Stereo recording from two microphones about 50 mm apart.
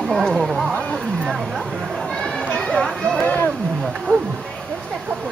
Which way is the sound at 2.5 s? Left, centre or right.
Centre.